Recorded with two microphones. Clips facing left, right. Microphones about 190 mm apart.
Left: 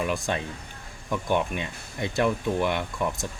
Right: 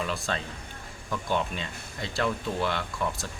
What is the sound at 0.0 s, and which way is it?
A man's voice, 15° left (ahead or behind).